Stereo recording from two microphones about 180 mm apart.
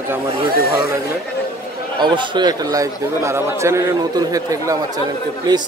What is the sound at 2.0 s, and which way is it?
A man's voice, 25° right (ahead or behind).